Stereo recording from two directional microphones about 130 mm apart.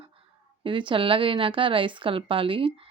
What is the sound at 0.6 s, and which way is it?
A woman's voice, 40° right (ahead or behind).